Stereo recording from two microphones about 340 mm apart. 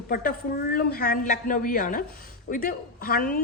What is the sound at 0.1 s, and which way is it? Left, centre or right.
A woman's voice, left.